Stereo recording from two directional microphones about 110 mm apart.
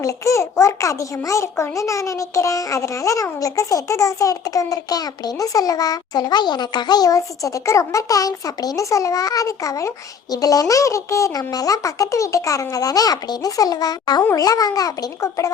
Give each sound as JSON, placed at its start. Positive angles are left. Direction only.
{"t": 0.0, "sound": "a child's voice", "side_deg": 30}